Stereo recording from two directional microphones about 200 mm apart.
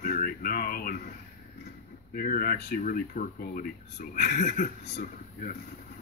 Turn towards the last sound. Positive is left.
turn(degrees=45)  # may be behind; listen again after turning